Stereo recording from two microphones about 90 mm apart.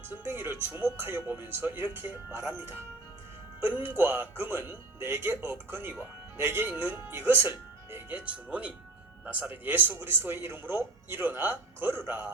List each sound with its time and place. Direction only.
0.1 s speech: 25° right (ahead or behind)
8.2 s speech: 15° right (ahead or behind)